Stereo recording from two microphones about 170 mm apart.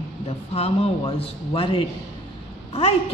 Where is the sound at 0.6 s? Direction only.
35° left (ahead or behind).